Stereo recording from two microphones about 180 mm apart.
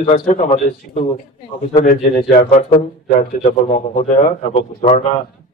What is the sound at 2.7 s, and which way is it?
A man's voice, 40° left (ahead or behind).